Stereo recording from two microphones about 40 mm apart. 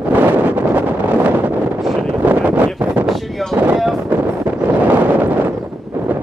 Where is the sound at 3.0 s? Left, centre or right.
Centre.